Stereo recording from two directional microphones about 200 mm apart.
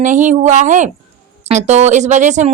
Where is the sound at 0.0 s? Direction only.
40° right (ahead or behind).